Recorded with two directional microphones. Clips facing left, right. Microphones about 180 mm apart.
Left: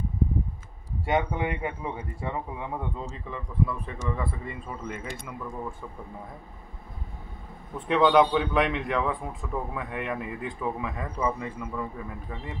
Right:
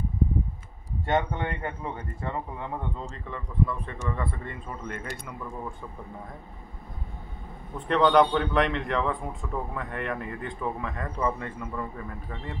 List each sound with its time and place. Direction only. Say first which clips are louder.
1.0 s speech: left 1 dB; 10° left (ahead or behind)
7.9 s a man's voice: even; 5° left (ahead or behind)